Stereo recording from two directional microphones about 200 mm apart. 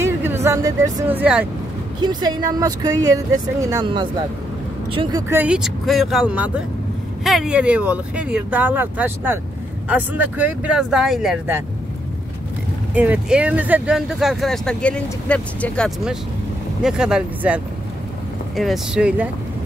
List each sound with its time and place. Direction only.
0.0 s speech: 10° right (ahead or behind)
2.0 s speech: 20° right (ahead or behind)
5.3 s speech: 5° right (ahead or behind)
12.9 s speech: 5° right (ahead or behind)
18.6 s speech: centre (ahead or behind)